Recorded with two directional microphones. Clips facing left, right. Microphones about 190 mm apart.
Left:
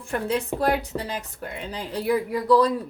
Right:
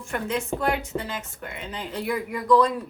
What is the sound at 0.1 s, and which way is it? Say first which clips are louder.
Speech: left 2 dB; 35° left (ahead or behind).